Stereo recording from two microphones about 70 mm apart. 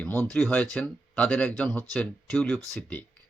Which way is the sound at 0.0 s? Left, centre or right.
Left.